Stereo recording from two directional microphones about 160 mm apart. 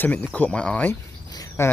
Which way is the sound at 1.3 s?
25° left (ahead or behind).